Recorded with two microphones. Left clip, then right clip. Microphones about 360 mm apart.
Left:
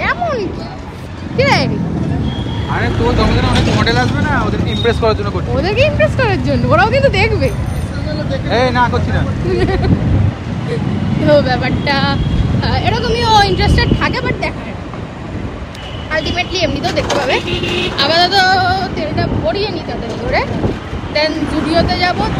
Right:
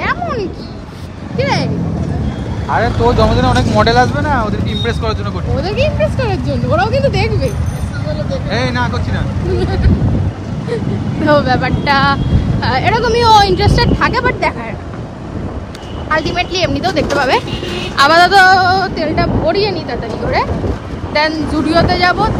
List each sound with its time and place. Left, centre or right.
0.0 s a sound: centre
1.3 s vehicle: centre
2.7 s speech: centre
5.9 s speech: centre
7.2 s speech: left
8.5 s speech: centre
11.2 s speech: centre
16.1 s speech: centre